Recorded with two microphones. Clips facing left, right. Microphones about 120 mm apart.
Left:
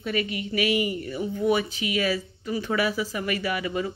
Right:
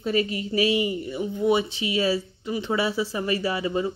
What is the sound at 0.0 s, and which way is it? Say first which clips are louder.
A woman's voice: right 3 dB; 35° right (ahead or behind).